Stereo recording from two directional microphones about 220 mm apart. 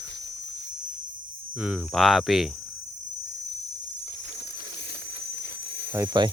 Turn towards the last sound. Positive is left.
turn(degrees=-15)  # may be behind; listen again after turning